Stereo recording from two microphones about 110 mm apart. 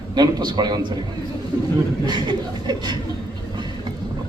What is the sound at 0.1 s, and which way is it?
Speech, 40° right (ahead or behind).